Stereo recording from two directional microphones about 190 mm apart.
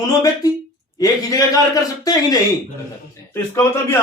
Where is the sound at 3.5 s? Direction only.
15° left (ahead or behind).